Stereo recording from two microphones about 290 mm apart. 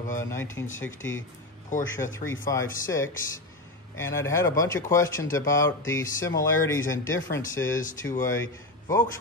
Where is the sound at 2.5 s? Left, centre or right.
Centre.